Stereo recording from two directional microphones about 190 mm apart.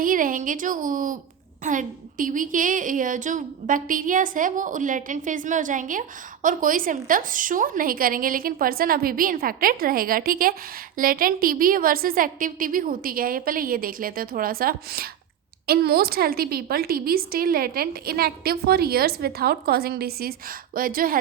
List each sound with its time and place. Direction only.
0.0 s a woman's voice: 45° right (ahead or behind)